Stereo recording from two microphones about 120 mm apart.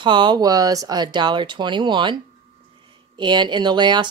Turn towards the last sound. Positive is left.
turn(degrees=-40)  # may be behind; listen again after turning